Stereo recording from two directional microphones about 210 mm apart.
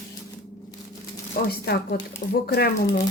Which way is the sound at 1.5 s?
50° left (ahead or behind).